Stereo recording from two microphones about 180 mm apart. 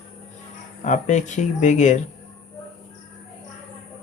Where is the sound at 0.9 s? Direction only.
40° left (ahead or behind).